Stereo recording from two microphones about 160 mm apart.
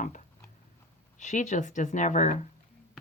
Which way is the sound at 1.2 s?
50° left (ahead or behind).